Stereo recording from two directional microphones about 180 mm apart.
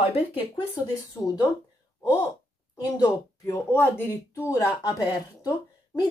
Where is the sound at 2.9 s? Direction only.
20° left (ahead or behind).